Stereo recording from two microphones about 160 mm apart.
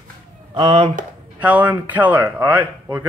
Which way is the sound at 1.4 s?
10° right (ahead or behind).